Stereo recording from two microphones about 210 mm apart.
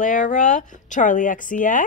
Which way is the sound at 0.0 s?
35° left (ahead or behind).